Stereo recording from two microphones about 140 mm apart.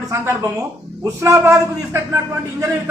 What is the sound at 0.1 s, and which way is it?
A man's voice, 20° right (ahead or behind).